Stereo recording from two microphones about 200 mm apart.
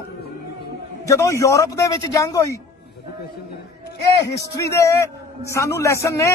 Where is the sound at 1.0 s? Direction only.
15° left (ahead or behind).